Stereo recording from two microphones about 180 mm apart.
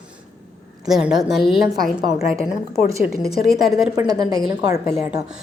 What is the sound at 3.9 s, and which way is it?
Speech, 20° right (ahead or behind).